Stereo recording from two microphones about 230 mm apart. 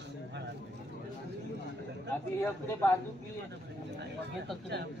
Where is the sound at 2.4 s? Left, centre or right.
Centre.